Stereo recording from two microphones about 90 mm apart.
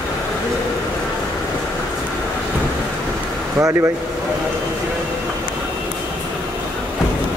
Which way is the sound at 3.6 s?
30° right (ahead or behind).